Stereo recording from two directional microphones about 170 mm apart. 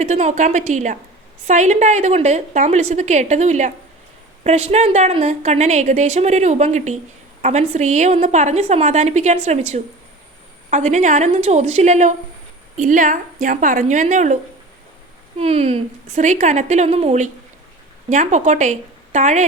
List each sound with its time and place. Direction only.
0.0 s a woman's voice: 45° right (ahead or behind)
15.4 s a woman's voice: 40° right (ahead or behind)